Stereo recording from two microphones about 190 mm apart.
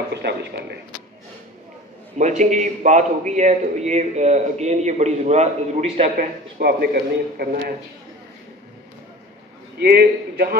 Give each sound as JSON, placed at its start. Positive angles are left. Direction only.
{"t": 0.1, "sound": "speech", "side_deg": -60}
{"t": 2.1, "sound": "a man's voice", "side_deg": -40}
{"t": 6.1, "sound": "a man's voice", "side_deg": -55}
{"t": 9.8, "sound": "a man's voice", "side_deg": -55}